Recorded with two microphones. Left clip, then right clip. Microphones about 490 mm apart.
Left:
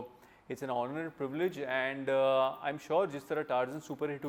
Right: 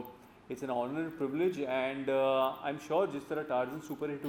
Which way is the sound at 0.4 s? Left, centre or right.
Left.